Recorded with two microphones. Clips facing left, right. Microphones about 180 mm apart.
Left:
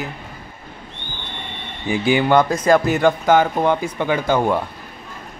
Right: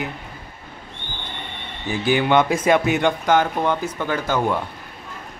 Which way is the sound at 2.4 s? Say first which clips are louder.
Left 2 dB; 5° right (ahead or behind).